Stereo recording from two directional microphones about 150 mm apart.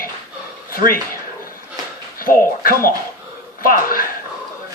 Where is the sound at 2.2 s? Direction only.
70° left (ahead or behind).